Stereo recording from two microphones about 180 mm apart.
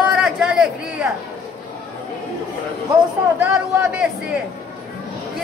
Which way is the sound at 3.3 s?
10° right (ahead or behind).